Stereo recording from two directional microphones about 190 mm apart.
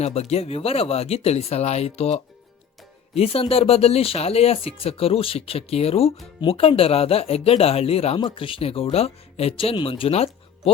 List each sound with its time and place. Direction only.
0.0 s speech: 35° left (ahead or behind)